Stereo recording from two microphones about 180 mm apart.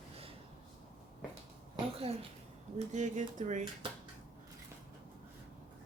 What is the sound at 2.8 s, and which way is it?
Speech, 40° right (ahead or behind).